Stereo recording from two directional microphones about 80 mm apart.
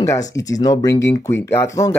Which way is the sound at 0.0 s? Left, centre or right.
Left.